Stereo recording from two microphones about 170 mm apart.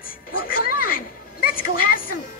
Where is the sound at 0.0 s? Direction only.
60° left (ahead or behind).